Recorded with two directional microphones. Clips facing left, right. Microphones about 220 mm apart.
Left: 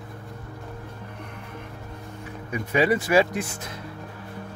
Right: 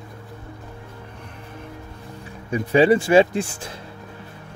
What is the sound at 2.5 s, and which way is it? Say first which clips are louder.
Speech: right 6 dB; 30° right (ahead or behind).